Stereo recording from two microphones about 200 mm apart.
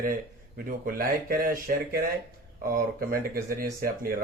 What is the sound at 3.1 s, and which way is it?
Speech, 45° right (ahead or behind).